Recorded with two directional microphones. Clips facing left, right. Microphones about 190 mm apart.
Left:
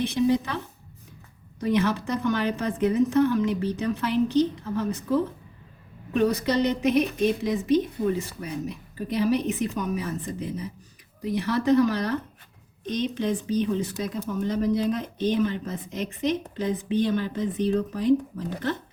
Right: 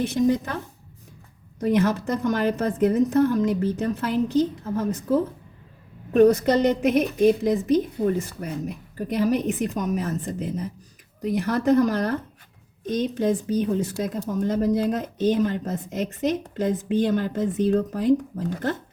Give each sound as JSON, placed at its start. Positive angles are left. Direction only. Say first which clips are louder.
{"t": 0.1, "sound": "speech", "louder": "right 1 dB", "side_deg": -45}
{"t": 1.6, "sound": "speech", "louder": "right 3 dB", "side_deg": -45}